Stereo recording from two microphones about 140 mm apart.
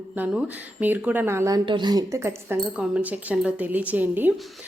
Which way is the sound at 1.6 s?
35° right (ahead or behind).